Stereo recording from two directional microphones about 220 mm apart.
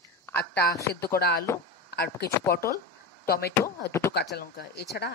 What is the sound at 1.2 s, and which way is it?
A woman's voice, 45° left (ahead or behind).